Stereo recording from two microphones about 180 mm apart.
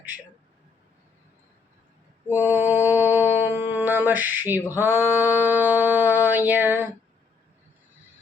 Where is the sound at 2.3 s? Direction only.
10° right (ahead or behind).